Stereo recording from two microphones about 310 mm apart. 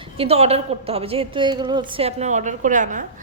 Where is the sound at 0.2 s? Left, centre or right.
Centre.